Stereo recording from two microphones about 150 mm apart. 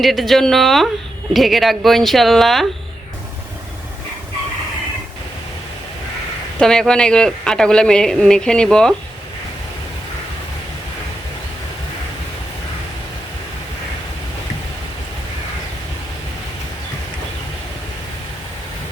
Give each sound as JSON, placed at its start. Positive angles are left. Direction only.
{"t": 0.0, "sound": "speech", "side_deg": 0}
{"t": 6.6, "sound": "speech", "side_deg": 5}